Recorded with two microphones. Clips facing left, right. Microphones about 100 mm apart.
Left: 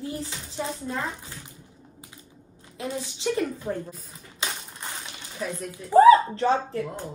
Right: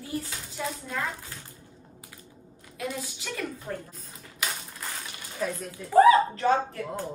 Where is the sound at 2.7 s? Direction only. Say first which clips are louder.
Left 2 dB; 25° left (ahead or behind).